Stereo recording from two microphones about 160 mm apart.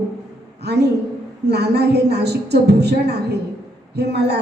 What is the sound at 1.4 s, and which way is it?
A man's voice, 90° right.